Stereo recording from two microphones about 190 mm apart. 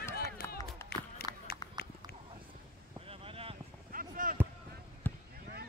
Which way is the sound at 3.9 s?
45° right (ahead or behind).